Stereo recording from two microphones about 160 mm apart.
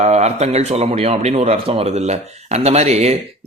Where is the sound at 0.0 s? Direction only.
45° right (ahead or behind).